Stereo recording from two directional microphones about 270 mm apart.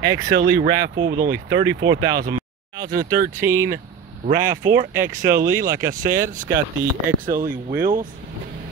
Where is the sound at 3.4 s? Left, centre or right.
Centre.